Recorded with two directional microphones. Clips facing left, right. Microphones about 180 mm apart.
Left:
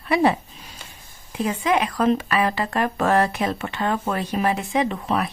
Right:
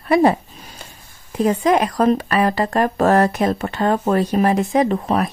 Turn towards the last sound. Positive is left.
turn(degrees=-40)  # may be behind; listen again after turning